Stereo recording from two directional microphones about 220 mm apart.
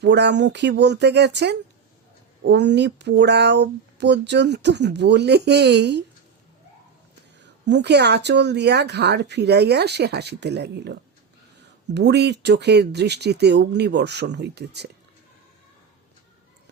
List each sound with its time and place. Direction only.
0.0 s speech: 50° right (ahead or behind)
7.4 s speech: 50° right (ahead or behind)